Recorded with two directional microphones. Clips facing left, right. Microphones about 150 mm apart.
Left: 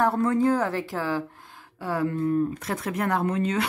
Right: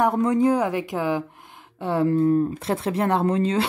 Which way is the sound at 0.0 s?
15° right (ahead or behind).